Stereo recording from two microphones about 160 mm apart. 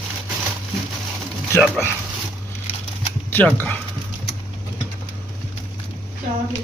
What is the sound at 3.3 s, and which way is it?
Speech, 10° left (ahead or behind).